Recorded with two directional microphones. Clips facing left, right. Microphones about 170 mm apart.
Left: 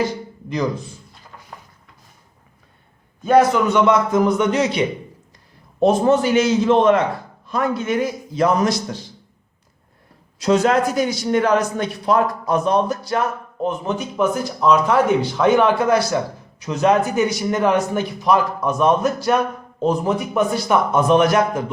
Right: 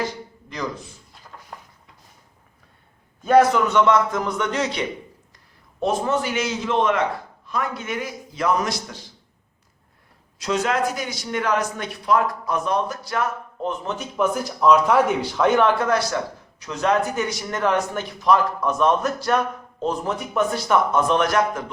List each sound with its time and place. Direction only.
3.2 s speech: centre (ahead or behind)
4.1 s speech: 15° left (ahead or behind)
5.8 s a man's voice: 30° left (ahead or behind)
10.6 s a man's voice: 30° left (ahead or behind)
13.6 s speech: 10° left (ahead or behind)
14.0 s speech: 5° right (ahead or behind)